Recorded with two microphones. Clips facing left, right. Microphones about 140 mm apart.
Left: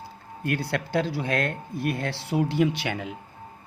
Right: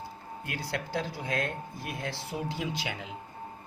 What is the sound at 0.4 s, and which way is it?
Speech, 60° left (ahead or behind).